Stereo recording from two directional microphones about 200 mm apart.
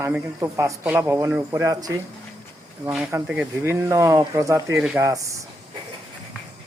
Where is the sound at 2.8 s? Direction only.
5° right (ahead or behind).